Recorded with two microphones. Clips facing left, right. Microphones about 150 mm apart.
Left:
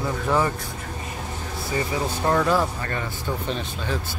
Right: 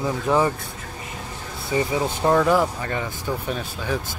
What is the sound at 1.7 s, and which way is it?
Speech, 15° right (ahead or behind).